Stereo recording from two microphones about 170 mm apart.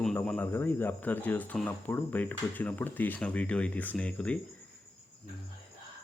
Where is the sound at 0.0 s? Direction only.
5° left (ahead or behind).